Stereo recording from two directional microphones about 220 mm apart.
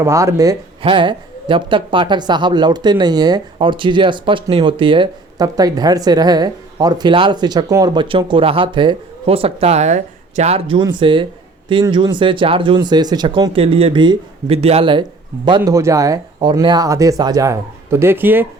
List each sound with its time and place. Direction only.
0.0 s speech: 15° right (ahead or behind)